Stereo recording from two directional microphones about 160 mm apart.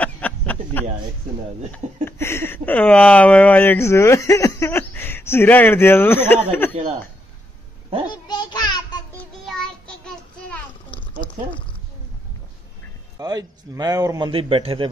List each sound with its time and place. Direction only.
0.0 s a sound: 10° left (ahead or behind)
2.0 s speech: 15° left (ahead or behind)
8.1 s a sound: 25° left (ahead or behind)
9.5 s child singing: 5° left (ahead or behind)
13.2 s a man's voice: 25° right (ahead or behind)
14.3 s a man's voice: 35° right (ahead or behind)